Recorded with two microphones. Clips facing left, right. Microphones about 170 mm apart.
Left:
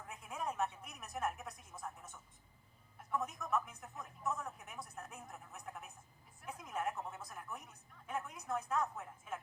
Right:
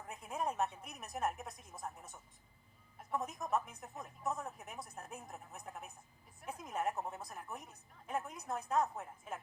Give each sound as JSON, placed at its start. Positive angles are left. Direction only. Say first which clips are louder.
{"t": 0.1, "sound": "music", "louder": "right 3 dB", "side_deg": -35}
{"t": 3.1, "sound": "speech", "louder": "right 1 dB", "side_deg": -40}
{"t": 6.4, "sound": "a sound", "louder": "right 2 dB", "side_deg": -35}
{"t": 8.0, "sound": "a woman's voice", "louder": "right 2 dB", "side_deg": -40}